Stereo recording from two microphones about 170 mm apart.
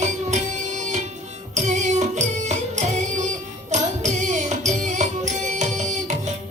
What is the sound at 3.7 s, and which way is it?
Music, 45° right (ahead or behind).